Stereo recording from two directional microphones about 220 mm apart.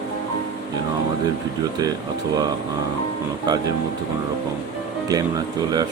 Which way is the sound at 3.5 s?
20° right (ahead or behind).